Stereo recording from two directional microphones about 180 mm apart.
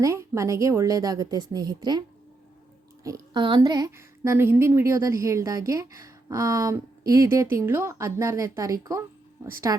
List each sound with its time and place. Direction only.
0.0 s a woman's voice: 15° right (ahead or behind)